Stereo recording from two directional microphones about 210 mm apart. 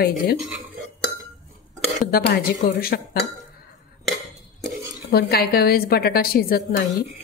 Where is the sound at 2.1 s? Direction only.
45° left (ahead or behind).